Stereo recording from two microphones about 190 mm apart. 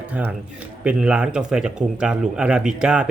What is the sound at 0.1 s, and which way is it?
Speech, 5° right (ahead or behind).